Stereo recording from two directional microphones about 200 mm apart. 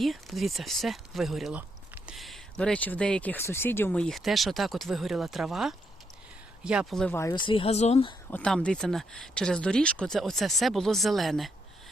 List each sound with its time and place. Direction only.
0.0 s speech: centre (ahead or behind); by 8.1 s 30° left (ahead or behind)
8.3 s speech: 5° left (ahead or behind)